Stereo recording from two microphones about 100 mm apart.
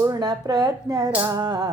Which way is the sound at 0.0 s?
40° right (ahead or behind).